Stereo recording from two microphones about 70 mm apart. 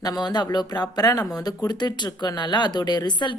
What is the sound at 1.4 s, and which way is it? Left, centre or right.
Speech, left.